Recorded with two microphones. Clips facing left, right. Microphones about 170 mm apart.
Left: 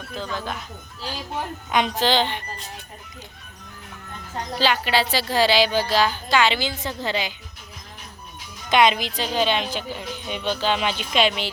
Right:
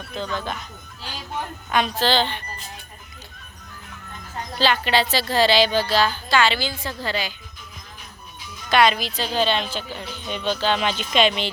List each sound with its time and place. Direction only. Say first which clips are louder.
0.2 s speech: right 2 dB; 5° left (ahead or behind)
1.7 s speech: even; 15° left (ahead or behind)
4.6 s speech: right 1 dB; 10° left (ahead or behind)
8.7 s speech: even; 20° left (ahead or behind)